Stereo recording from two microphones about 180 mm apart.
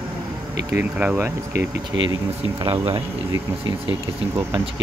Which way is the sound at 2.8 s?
20° right (ahead or behind).